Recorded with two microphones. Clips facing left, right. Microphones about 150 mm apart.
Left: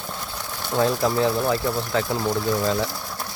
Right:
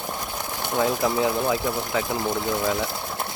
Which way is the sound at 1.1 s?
15° right (ahead or behind).